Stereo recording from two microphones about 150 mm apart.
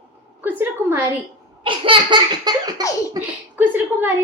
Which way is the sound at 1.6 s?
35° right (ahead or behind).